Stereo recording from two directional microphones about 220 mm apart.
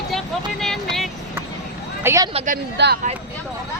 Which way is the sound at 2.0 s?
15° right (ahead or behind).